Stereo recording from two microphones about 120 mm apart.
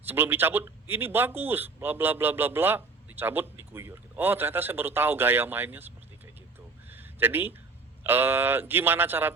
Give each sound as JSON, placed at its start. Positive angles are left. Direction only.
{"t": 0.0, "sound": "speech", "side_deg": -20}
{"t": 6.9, "sound": "a sound", "side_deg": -15}
{"t": 8.0, "sound": "speech", "side_deg": -20}